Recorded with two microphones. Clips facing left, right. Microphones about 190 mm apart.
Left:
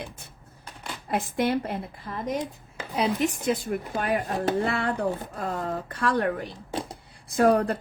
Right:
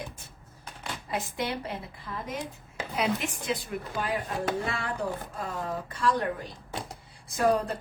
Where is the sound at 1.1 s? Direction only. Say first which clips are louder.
Left 7 dB; 55° left (ahead or behind).